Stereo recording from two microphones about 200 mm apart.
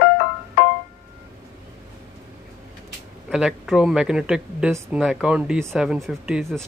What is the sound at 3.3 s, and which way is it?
Speech, 5° right (ahead or behind).